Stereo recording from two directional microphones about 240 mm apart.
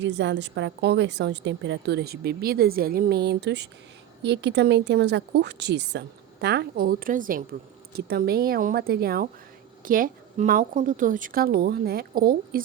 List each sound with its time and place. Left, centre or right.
0.0 s a woman's voice: right